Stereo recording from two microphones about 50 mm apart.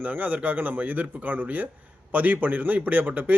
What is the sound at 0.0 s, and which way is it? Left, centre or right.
A man's voice, right.